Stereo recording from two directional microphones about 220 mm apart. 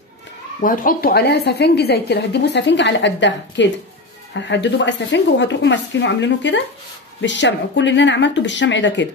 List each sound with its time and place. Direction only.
0.6 s a woman's voice: 40° left (ahead or behind); by 9.0 s 55° left (ahead or behind)